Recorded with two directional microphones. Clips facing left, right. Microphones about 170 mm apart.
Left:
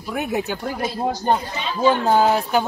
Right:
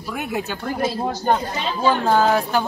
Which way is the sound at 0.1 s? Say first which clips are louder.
Left 3 dB; 15° left (ahead or behind).